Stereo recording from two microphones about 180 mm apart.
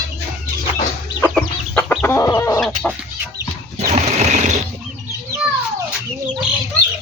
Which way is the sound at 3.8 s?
40° right (ahead or behind).